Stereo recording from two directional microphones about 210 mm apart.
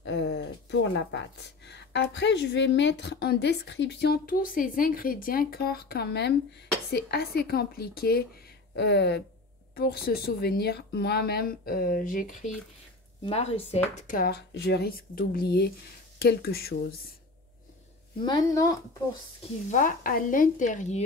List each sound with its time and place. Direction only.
0.0 s a sound: 55° left (ahead or behind)
1.7 s a woman's voice: 55° left (ahead or behind); by 12.4 s 40° left (ahead or behind)
13.2 s speech: 30° left (ahead or behind)
13.9 s a woman's voice: 40° left (ahead or behind)
18.2 s speech: 20° left (ahead or behind)
19.7 s speech: 40° left (ahead or behind)